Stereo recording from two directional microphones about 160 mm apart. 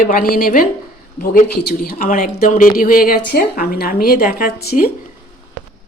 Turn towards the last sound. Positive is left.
turn(degrees=65)  # may be behind; listen again after turning